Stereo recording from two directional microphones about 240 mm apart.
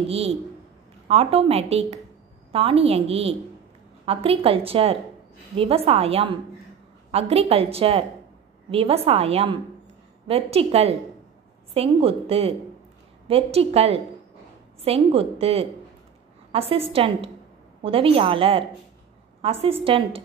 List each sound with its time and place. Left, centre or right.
0.1 s a woman's voice: right